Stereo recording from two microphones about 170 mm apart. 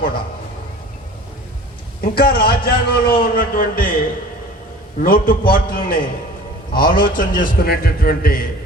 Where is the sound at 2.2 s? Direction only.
60° left (ahead or behind).